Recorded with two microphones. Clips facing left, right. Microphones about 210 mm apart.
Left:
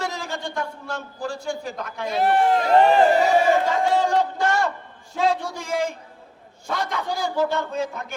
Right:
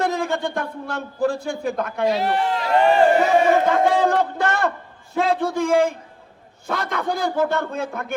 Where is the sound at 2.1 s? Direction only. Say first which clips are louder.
Left 4 dB; 50° left (ahead or behind).